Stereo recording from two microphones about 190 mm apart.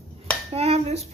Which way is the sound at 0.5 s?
30° right (ahead or behind).